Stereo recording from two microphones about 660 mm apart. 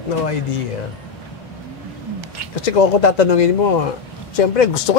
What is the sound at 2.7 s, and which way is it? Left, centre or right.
Speech, left.